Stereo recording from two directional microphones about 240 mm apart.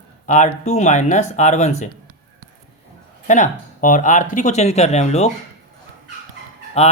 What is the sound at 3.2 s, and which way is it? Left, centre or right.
Speech, left.